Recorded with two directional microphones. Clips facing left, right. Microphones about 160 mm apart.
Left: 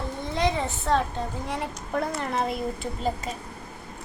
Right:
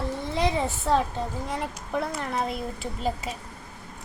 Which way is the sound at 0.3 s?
5° right (ahead or behind).